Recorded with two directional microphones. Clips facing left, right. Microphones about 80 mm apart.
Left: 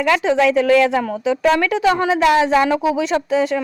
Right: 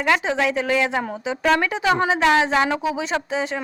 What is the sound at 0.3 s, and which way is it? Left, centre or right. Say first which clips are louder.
A woman's voice: left 7 dB; right.